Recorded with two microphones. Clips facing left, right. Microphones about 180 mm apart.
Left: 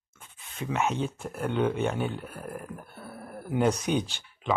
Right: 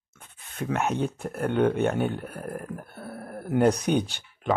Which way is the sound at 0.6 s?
60° right (ahead or behind).